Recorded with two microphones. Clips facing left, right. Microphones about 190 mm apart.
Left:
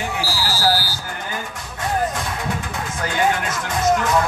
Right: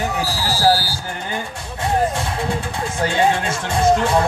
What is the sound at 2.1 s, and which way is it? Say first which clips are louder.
Speech: right 3 dB; 30° right (ahead or behind).